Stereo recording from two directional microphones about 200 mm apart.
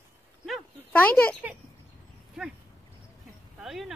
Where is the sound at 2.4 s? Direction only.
5° right (ahead or behind).